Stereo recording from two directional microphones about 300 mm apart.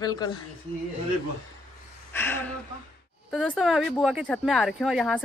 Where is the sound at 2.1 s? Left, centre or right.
Centre.